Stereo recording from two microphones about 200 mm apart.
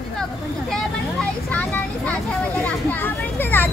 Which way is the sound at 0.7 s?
5° left (ahead or behind).